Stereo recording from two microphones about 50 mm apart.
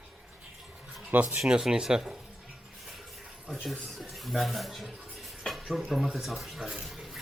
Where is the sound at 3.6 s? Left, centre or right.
Centre.